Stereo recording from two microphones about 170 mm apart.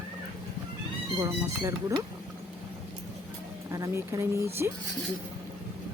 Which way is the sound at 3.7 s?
15° right (ahead or behind).